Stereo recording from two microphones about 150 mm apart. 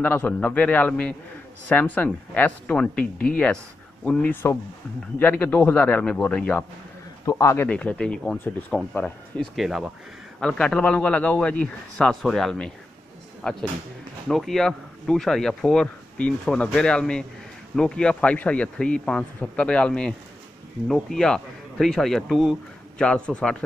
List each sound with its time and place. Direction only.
0.0 s speech: 10° left (ahead or behind)
7.2 s a man's voice: 20° left (ahead or behind)
7.6 s speech: 10° left (ahead or behind)